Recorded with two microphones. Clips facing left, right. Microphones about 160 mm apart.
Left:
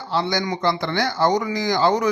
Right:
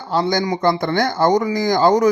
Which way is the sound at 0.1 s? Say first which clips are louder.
Right 4 dB; 45° right (ahead or behind).